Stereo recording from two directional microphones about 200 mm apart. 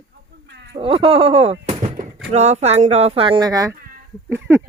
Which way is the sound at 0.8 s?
25° right (ahead or behind).